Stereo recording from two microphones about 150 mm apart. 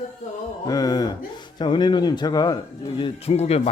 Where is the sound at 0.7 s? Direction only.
25° left (ahead or behind).